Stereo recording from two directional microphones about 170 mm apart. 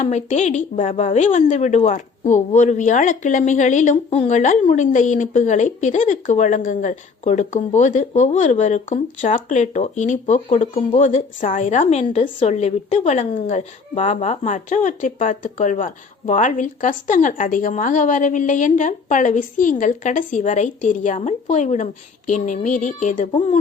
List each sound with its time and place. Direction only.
0.0 s a woman's voice: 40° left (ahead or behind)